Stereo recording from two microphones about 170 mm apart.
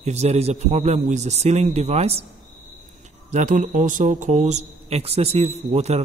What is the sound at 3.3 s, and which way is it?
A man's voice, 45° right (ahead or behind).